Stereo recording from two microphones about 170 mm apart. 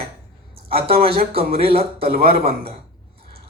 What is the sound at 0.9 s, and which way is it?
Speech, 35° right (ahead or behind).